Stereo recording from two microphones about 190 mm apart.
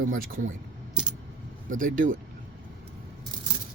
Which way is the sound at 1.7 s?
45° right (ahead or behind).